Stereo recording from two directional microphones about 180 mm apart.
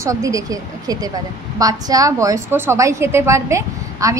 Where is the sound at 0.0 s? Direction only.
20° right (ahead or behind).